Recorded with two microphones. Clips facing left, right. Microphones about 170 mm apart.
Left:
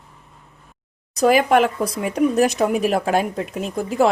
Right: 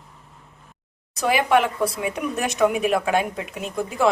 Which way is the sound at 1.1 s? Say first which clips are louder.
Left 4 dB; 40° left (ahead or behind).